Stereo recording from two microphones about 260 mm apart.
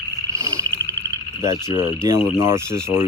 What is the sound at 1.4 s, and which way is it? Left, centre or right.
Speech, centre.